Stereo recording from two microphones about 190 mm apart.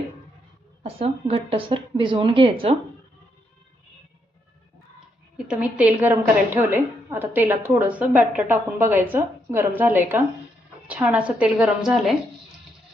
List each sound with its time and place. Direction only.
0.8 s a woman's voice: 30° right (ahead or behind)
5.5 s a woman's voice: 5° right (ahead or behind)